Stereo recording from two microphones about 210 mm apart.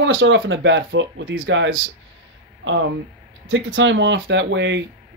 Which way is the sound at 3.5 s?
65° right (ahead or behind).